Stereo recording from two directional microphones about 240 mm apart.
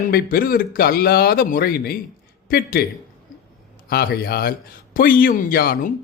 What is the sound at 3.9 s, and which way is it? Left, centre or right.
Speech, left.